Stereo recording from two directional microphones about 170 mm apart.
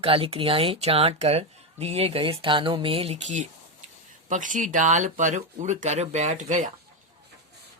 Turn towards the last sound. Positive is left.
turn(degrees=-45)  # may be behind; listen again after turning